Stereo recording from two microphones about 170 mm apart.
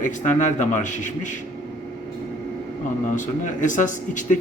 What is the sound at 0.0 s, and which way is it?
Speech, 45° left (ahead or behind).